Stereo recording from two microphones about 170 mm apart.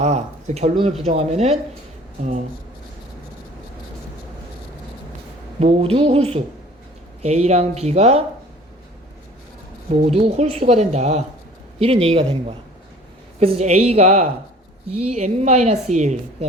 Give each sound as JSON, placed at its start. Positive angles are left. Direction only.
{"t": 0.0, "sound": "a woman's voice", "side_deg": -40}
{"t": 5.5, "sound": "a woman's voice", "side_deg": -35}
{"t": 10.0, "sound": "a woman's voice", "side_deg": -35}